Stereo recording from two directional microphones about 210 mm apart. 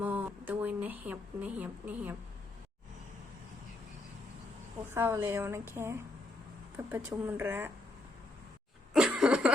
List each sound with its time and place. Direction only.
0.0 s a sound: 5° right (ahead or behind)
4.9 s a woman's voice: 10° right (ahead or behind)
8.9 s cough: 5° right (ahead or behind)